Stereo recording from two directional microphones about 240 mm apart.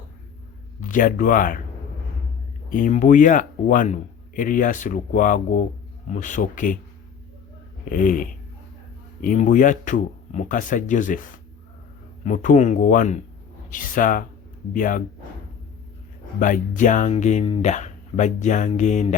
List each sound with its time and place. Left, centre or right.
0.8 s a man's voice: left
2.6 s a man's voice: left
7.9 s a man's voice: left
16.4 s a man's voice: left